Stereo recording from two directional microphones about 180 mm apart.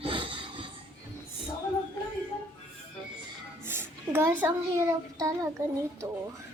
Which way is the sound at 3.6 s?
15° right (ahead or behind).